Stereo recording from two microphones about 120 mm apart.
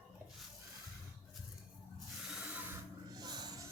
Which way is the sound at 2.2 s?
5° right (ahead or behind).